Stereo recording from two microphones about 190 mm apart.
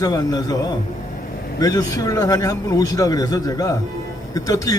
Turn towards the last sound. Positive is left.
turn(degrees=15)  # may be behind; listen again after turning